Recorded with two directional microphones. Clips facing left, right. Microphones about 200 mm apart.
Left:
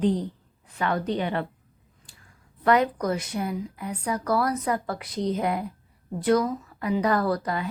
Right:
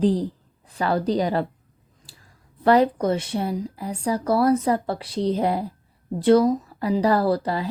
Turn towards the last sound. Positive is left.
turn(degrees=-30)  # may be behind; listen again after turning